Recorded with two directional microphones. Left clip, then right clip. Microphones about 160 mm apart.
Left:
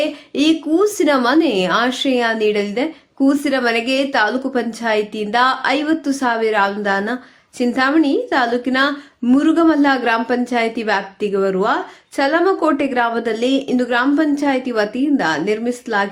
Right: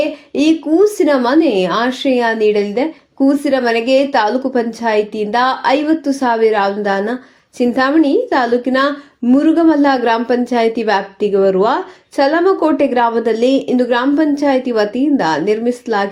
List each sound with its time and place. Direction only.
0.0 s a woman's voice: centre (ahead or behind)